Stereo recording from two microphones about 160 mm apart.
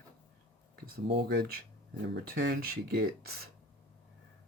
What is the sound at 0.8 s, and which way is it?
Speech, 85° right.